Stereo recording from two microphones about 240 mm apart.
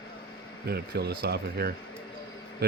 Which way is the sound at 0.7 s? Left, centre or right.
Right.